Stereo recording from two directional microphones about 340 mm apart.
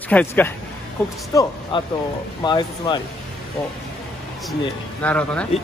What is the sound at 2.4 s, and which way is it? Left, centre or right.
Speech, centre.